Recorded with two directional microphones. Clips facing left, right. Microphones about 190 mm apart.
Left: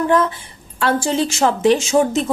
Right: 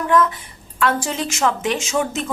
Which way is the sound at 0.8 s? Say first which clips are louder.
Left 3 dB; 30° left (ahead or behind).